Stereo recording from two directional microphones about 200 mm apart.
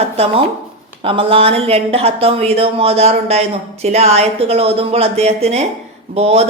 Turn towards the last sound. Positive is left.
turn(degrees=-30)  # may be behind; listen again after turning